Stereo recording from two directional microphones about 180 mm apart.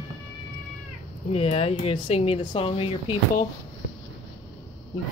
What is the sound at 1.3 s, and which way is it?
Speech, 35° left (ahead or behind).